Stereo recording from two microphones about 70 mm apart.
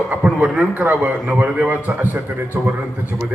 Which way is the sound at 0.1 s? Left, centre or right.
Centre.